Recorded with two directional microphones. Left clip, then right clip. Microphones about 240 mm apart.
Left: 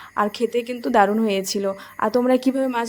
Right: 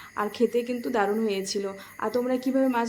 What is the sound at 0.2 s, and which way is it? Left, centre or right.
A woman's voice, left.